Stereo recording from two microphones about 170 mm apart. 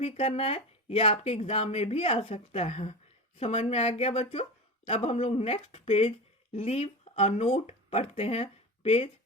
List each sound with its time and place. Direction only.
0.0 s speech: 40° left (ahead or behind)